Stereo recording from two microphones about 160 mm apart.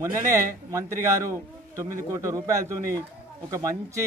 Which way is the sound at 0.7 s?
20° right (ahead or behind).